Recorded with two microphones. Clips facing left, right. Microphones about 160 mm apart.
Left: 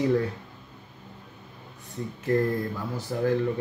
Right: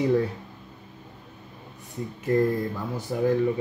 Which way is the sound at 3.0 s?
15° right (ahead or behind).